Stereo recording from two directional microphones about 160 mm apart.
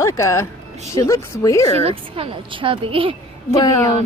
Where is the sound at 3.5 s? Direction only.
20° left (ahead or behind).